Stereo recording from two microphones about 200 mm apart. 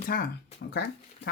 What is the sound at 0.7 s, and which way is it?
Speech, 55° left (ahead or behind).